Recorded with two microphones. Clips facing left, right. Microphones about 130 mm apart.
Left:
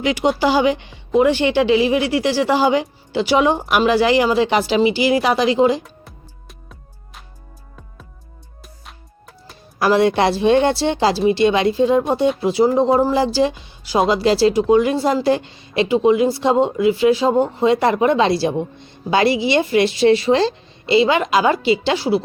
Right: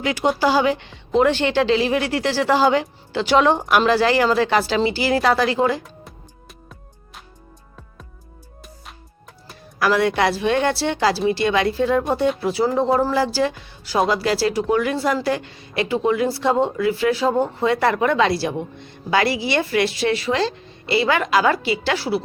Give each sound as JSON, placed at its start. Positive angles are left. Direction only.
{"t": 0.0, "sound": "a woman's voice", "side_deg": 15}
{"t": 5.8, "sound": "music", "side_deg": 0}
{"t": 9.7, "sound": "speech", "side_deg": 25}